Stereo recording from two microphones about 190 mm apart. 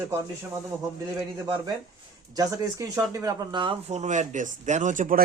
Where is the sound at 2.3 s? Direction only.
20° right (ahead or behind).